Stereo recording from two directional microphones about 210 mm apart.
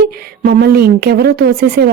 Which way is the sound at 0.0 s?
45° right (ahead or behind).